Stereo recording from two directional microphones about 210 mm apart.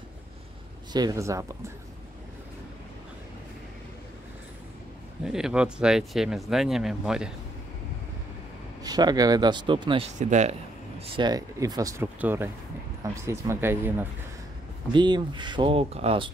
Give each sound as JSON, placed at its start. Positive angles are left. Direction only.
{"t": 0.9, "sound": "speech", "side_deg": -15}
{"t": 5.2, "sound": "speech", "side_deg": -5}
{"t": 8.8, "sound": "speech", "side_deg": -20}
{"t": 10.1, "sound": "speech", "side_deg": -35}
{"t": 11.0, "sound": "speech", "side_deg": -20}
{"t": 14.9, "sound": "speech", "side_deg": -20}